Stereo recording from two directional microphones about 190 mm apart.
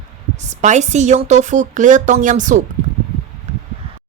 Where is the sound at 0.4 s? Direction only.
40° right (ahead or behind).